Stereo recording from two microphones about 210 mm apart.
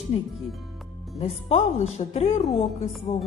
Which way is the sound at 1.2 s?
30° left (ahead or behind).